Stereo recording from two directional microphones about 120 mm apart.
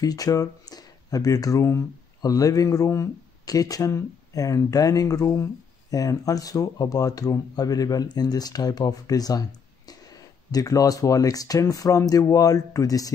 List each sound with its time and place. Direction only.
0.0 s speech: 30° left (ahead or behind)